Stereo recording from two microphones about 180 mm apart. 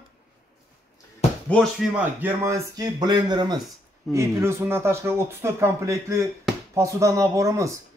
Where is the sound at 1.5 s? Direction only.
5° left (ahead or behind).